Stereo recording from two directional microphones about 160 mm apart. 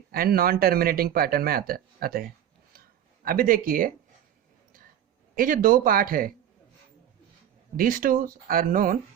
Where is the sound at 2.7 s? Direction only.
65° right (ahead or behind).